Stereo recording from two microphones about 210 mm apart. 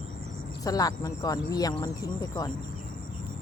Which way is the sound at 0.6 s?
15° left (ahead or behind).